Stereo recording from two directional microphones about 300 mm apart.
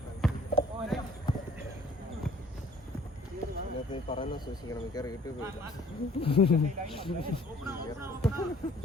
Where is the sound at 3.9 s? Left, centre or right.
Centre.